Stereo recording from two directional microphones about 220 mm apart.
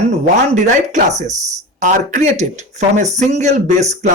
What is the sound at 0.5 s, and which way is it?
Speech, 35° right (ahead or behind).